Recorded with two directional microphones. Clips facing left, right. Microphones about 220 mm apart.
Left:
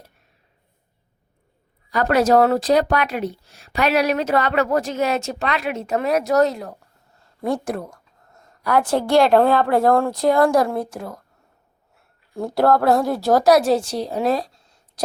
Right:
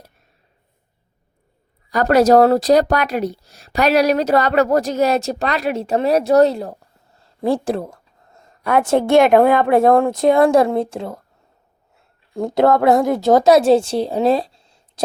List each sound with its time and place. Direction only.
1.9 s a woman's voice: 40° right (ahead or behind); by 11.2 s 25° right (ahead or behind)
12.4 s a woman's voice: 20° right (ahead or behind)